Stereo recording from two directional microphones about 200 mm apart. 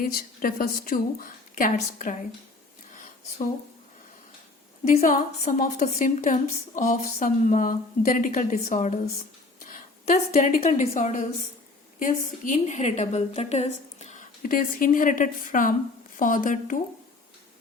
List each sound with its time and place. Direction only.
0.0 s a woman's voice: 45° left (ahead or behind)
2.9 s a sound: 40° left (ahead or behind)
4.9 s a woman's voice: 35° left (ahead or behind)